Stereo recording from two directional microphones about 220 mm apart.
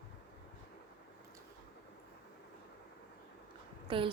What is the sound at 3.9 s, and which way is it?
Speech, 25° right (ahead or behind).